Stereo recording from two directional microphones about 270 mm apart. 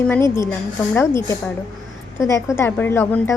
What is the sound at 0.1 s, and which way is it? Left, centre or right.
A woman's voice, centre.